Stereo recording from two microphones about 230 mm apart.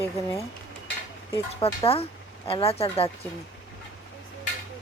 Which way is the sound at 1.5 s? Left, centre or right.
Left.